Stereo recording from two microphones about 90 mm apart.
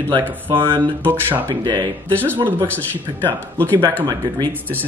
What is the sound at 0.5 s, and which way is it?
Speech, 65° right (ahead or behind).